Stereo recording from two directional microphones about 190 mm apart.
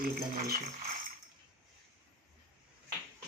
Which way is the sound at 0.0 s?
55° right (ahead or behind).